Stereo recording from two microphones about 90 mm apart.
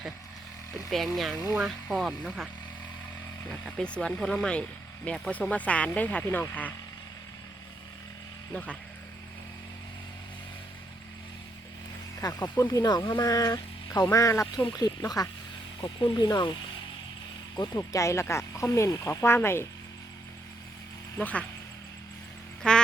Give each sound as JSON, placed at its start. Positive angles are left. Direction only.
{"t": 0.9, "sound": "speech", "side_deg": 0}
{"t": 3.8, "sound": "speech", "side_deg": 15}
{"t": 8.5, "sound": "speech", "side_deg": 15}
{"t": 12.2, "sound": "speech", "side_deg": 40}
{"t": 14.7, "sound": "speech", "side_deg": 45}
{"t": 15.8, "sound": "speech", "side_deg": 60}
{"t": 17.6, "sound": "speech", "side_deg": 40}
{"t": 19.2, "sound": "speech", "side_deg": 25}
{"t": 21.2, "sound": "speech", "side_deg": 15}
{"t": 22.6, "sound": "quack", "side_deg": 10}